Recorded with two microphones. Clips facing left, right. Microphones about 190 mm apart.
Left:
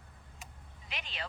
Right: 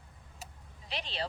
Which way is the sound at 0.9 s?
35° right (ahead or behind).